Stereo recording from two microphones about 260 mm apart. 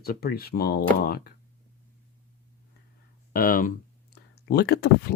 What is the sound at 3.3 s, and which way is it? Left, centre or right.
Speech, left.